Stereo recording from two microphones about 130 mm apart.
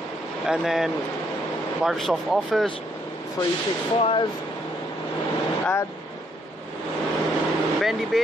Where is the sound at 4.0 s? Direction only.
45° left (ahead or behind).